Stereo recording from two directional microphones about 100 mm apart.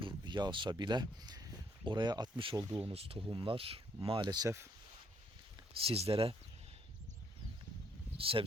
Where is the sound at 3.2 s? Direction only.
55° right (ahead or behind).